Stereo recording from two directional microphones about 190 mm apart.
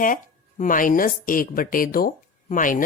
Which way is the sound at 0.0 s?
45° left (ahead or behind).